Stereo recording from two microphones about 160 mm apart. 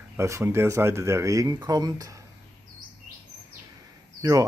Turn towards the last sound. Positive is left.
turn(degrees=-20)  # may be behind; listen again after turning